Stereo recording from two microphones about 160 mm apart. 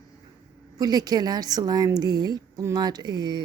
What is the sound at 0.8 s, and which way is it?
A woman's voice, 25° right (ahead or behind).